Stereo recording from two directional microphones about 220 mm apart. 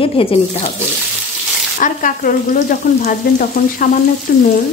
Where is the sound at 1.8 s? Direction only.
35° left (ahead or behind).